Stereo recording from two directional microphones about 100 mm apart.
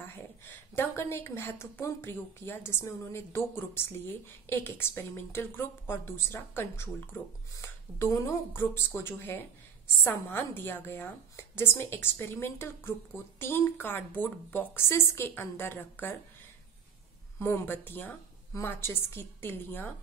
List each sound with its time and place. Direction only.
0.0 s a woman's voice: 25° left (ahead or behind)
17.4 s a woman's voice: 25° left (ahead or behind)